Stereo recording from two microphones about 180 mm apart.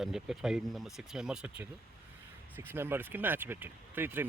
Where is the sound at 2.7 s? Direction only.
10° right (ahead or behind).